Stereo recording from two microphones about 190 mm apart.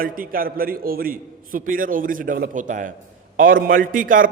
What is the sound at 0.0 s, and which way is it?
A man's voice, 50° right (ahead or behind).